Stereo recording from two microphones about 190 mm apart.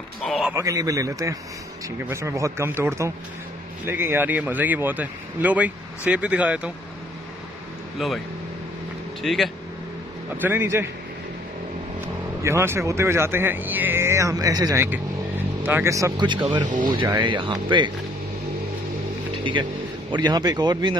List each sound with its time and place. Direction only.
0.2 s a sound: 5° right (ahead or behind)
0.6 s speech: 15° right (ahead or behind)
8.0 s speech: centre (ahead or behind)
9.2 s speech: centre (ahead or behind)
10.4 s speech: 10° right (ahead or behind)
12.4 s speech: 15° right (ahead or behind)
20.1 s speech: 20° right (ahead or behind)